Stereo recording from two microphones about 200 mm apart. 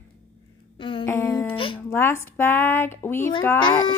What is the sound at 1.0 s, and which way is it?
Speech, 15° left (ahead or behind).